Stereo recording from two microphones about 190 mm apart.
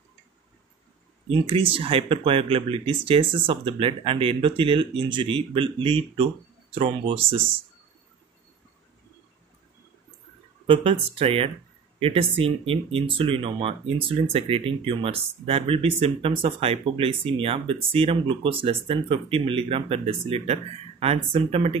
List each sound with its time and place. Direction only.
1.3 s speech: 25° right (ahead or behind)
10.7 s speech: 30° right (ahead or behind)